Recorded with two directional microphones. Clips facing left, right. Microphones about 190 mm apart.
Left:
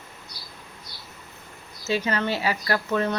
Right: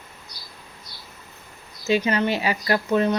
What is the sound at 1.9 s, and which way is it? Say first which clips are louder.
Speech: right 4 dB; 15° right (ahead or behind).